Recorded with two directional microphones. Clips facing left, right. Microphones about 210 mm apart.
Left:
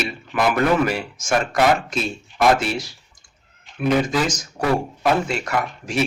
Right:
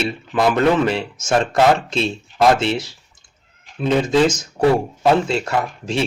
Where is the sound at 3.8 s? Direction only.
25° right (ahead or behind).